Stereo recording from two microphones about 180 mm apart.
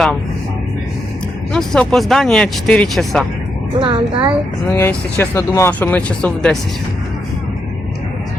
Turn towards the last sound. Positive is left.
turn(degrees=5)  # may be behind; listen again after turning